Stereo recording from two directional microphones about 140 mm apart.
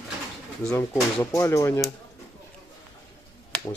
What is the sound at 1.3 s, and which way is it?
Speech, 20° left (ahead or behind).